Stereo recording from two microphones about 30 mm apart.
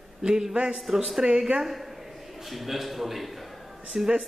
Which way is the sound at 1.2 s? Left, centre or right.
Right.